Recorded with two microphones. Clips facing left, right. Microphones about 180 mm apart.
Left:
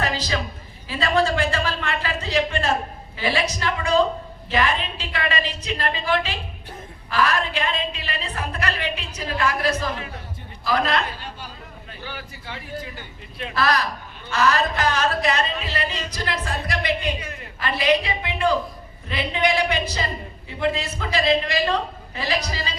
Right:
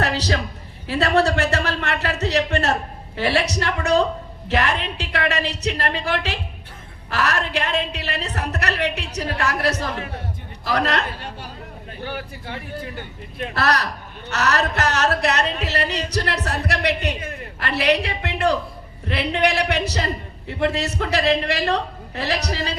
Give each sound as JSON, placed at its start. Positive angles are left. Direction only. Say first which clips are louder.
{"t": 0.0, "sound": "music", "louder": "right 3 dB", "side_deg": -70}
{"t": 0.9, "sound": "a woman's voice", "louder": "right 3 dB", "side_deg": -70}
{"t": 11.9, "sound": "speech", "louder": "right 6 dB", "side_deg": -55}
{"t": 13.5, "sound": "a woman's voice", "louder": "even", "side_deg": -70}